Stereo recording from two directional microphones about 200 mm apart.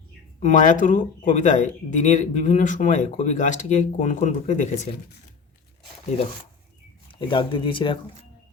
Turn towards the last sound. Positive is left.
turn(degrees=25)  # may be behind; listen again after turning